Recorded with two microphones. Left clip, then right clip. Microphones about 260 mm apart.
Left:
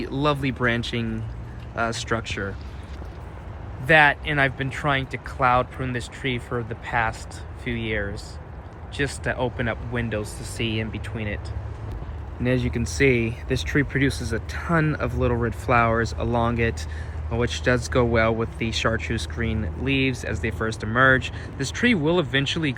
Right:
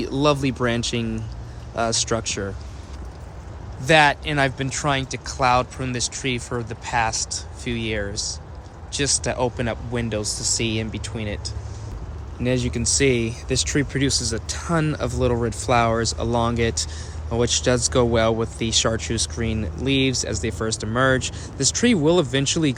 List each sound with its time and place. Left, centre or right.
0.0 s speech: centre
3.8 s speech: centre
12.4 s speech: centre